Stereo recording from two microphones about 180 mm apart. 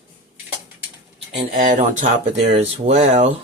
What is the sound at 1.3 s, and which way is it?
Speech, 45° right (ahead or behind).